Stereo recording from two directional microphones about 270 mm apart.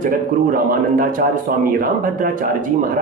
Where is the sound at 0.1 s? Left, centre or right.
Right.